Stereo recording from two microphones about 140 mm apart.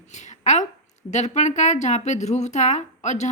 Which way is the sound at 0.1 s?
60° left (ahead or behind).